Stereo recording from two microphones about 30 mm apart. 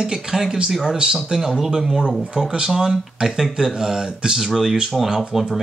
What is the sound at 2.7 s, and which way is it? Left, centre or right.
Speech, centre.